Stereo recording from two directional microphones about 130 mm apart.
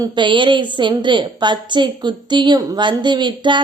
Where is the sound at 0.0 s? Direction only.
40° right (ahead or behind).